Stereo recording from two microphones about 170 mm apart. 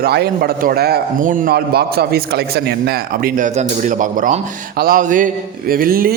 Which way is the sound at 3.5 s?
50° right (ahead or behind).